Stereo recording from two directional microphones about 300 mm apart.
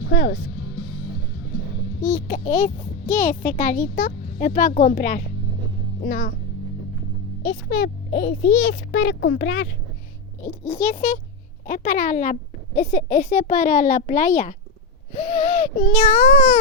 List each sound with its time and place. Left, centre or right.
0.1 s speech: left
2.1 s a child's voice: left
7.4 s a child's voice: left
8.3 s a child's voice: centre
8.6 s speech: left
10.4 s a child's voice: left
16.2 s a child's voice: left